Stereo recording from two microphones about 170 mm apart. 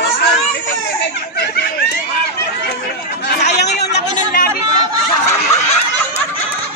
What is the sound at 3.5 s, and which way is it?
Chatter, 80° left.